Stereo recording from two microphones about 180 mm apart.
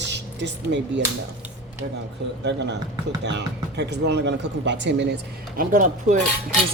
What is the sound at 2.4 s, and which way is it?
A woman's voice, 75° right (ahead or behind).